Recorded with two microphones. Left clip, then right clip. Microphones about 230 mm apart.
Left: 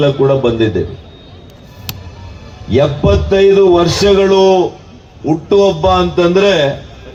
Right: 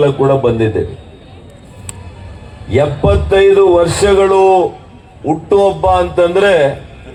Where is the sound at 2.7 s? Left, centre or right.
Right.